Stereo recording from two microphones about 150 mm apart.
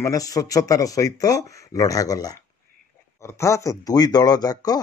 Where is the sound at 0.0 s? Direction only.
25° left (ahead or behind).